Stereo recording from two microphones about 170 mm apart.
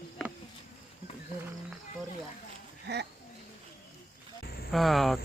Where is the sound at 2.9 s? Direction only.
80° right.